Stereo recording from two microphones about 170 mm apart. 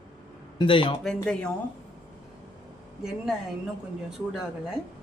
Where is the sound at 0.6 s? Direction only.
30° left (ahead or behind).